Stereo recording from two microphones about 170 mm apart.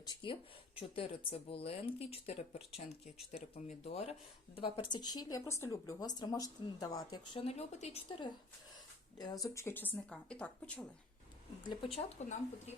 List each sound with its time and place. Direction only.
0.0 s speech: 25° left (ahead or behind)
4.5 s speech: 30° left (ahead or behind)
7.4 s speech: 40° left (ahead or behind)
9.1 s speech: 20° left (ahead or behind); by 10.8 s 5° left (ahead or behind)
11.9 s speech: 40° left (ahead or behind)